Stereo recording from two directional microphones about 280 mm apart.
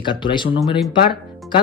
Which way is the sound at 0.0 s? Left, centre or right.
Centre.